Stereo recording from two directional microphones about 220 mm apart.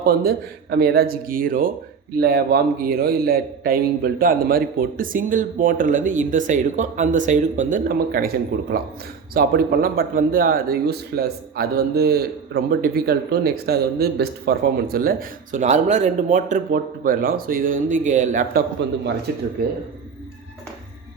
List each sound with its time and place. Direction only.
0.0 s speech: 45° right (ahead or behind)
9.3 s speech: 45° right (ahead or behind)
19.3 s speech: 45° right (ahead or behind)